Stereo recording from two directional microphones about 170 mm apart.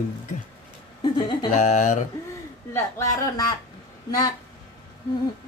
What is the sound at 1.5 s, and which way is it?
Speech, 45° left (ahead or behind).